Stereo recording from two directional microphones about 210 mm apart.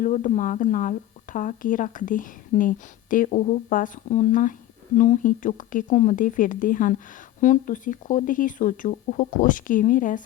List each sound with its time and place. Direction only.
0.0 s speech: 35° left (ahead or behind)